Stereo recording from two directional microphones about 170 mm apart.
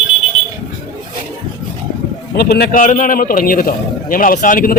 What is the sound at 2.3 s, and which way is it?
Speech, 70° left (ahead or behind).